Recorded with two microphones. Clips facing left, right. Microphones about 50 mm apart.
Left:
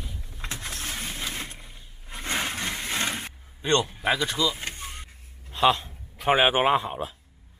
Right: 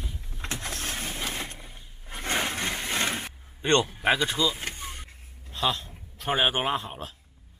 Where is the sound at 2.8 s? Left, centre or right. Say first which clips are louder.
Even; centre.